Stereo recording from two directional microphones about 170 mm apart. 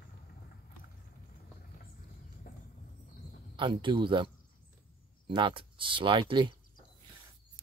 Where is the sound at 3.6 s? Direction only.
30° right (ahead or behind).